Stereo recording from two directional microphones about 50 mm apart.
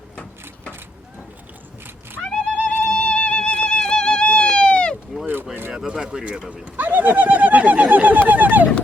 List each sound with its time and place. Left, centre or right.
2.5 s music: left
2.7 s music: centre
3.0 s music: left
5.2 s a sound: right
5.9 s bird: centre
6.7 s bird: right
8.3 s a sound: right